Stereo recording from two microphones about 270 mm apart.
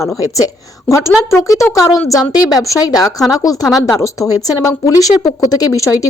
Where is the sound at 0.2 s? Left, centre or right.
Centre.